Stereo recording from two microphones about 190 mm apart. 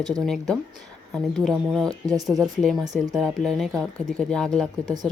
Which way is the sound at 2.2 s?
20° right (ahead or behind).